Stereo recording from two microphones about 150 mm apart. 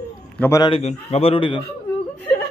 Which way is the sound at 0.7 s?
45° left (ahead or behind).